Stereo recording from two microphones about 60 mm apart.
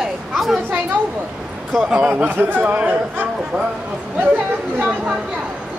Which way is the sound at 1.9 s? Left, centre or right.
Centre.